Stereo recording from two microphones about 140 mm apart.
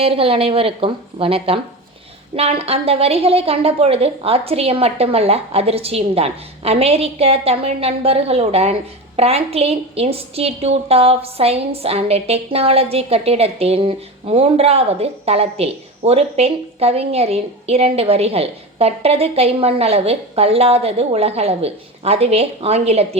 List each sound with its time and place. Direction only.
0.0 s a woman's voice: 40° right (ahead or behind)